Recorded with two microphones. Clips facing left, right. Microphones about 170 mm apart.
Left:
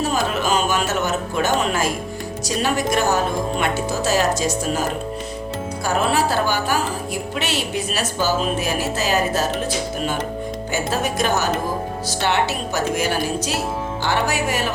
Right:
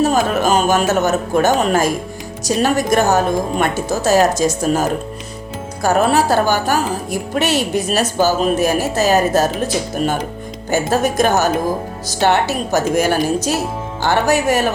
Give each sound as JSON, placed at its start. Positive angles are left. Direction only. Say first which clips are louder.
{"t": 0.0, "sound": "a woman's voice", "louder": "right 6 dB", "side_deg": -45}
{"t": 10.7, "sound": "a woman's voice", "louder": "right 8 dB", "side_deg": -45}